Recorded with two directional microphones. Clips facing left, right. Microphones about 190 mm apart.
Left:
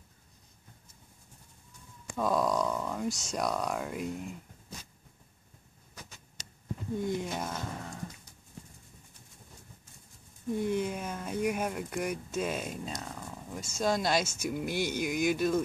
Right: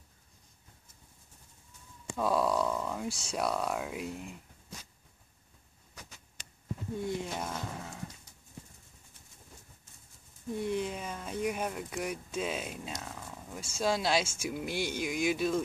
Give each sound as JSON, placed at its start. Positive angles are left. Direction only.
{"t": 2.1, "sound": "speech", "side_deg": -5}
{"t": 7.1, "sound": "speech", "side_deg": 0}
{"t": 10.5, "sound": "speech", "side_deg": 0}
{"t": 14.2, "sound": "speech", "side_deg": 40}
{"t": 14.5, "sound": "speech", "side_deg": 0}